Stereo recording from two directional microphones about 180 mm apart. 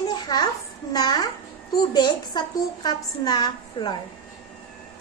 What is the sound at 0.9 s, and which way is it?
A child's voice, 20° left (ahead or behind).